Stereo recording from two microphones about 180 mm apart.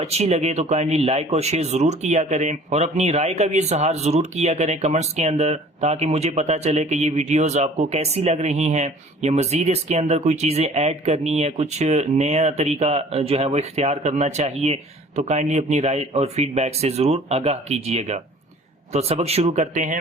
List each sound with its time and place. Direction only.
0.0 s speech: 35° right (ahead or behind)